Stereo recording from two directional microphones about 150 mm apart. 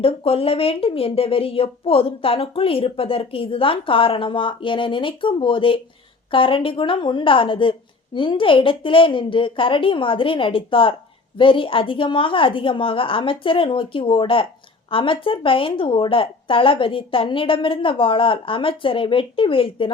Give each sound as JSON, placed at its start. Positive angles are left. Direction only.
{"t": 0.0, "sound": "speech", "side_deg": 40}